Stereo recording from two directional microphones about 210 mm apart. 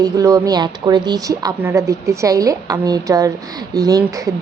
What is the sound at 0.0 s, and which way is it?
A woman's voice, 15° right (ahead or behind).